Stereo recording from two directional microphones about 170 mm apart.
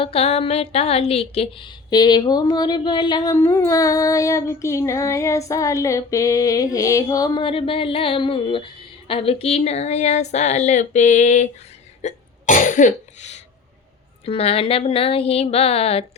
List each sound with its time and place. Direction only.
0.0 s a woman's voice: 35° left (ahead or behind)
12.0 s cough: 50° left (ahead or behind)
14.3 s speech: 35° left (ahead or behind)